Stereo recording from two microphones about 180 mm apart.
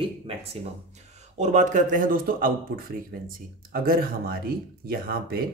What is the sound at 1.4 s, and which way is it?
Speech, 40° right (ahead or behind).